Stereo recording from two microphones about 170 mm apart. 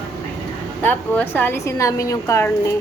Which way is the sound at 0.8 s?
10° left (ahead or behind).